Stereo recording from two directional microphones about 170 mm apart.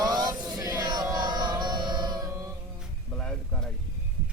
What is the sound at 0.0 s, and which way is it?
Music, 25° right (ahead or behind).